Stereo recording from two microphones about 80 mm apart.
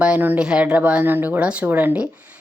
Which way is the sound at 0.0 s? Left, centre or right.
Centre.